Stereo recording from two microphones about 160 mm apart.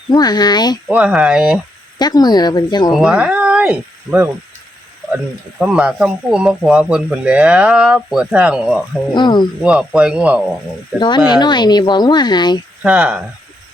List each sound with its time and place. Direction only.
0.1 s speech: 25° left (ahead or behind)
0.9 s speech: 5° right (ahead or behind)
2.0 s speech: 25° left (ahead or behind)
2.9 s speech: 5° right (ahead or behind)
9.1 s speech: 30° left (ahead or behind)
9.6 s speech: 5° right (ahead or behind)
11.3 s speech: 25° left (ahead or behind)
12.8 s speech: 5° right (ahead or behind)